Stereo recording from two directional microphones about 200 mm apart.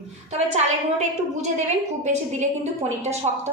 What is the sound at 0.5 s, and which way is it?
A woman's voice, 35° right (ahead or behind).